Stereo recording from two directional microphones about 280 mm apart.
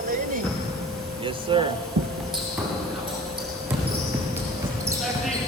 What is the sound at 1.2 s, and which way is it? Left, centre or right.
Speech, centre.